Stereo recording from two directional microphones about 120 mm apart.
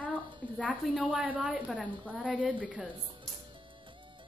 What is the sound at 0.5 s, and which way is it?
Speech, 5° left (ahead or behind).